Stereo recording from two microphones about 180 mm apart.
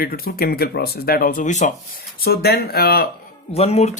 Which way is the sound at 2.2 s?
60° left (ahead or behind).